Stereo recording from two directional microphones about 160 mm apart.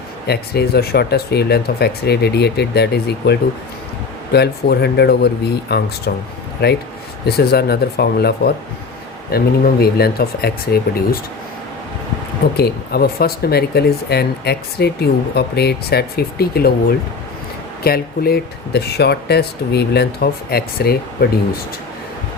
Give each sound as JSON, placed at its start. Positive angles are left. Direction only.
{"t": 0.3, "sound": "speech", "side_deg": 75}
{"t": 12.5, "sound": "speech", "side_deg": 80}
{"t": 17.8, "sound": "speech", "side_deg": 70}